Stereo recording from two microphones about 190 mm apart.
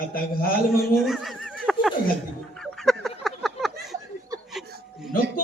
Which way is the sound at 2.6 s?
Centre (ahead or behind).